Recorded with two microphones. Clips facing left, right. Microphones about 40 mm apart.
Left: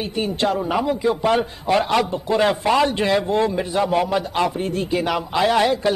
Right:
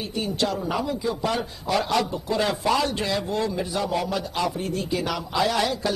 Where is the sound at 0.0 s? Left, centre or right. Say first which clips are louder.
Left 4 dB; left.